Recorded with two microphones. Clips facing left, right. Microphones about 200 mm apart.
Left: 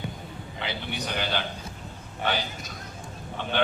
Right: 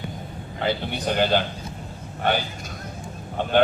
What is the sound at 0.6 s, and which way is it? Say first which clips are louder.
Speech: right 8 dB; 50° right (ahead or behind).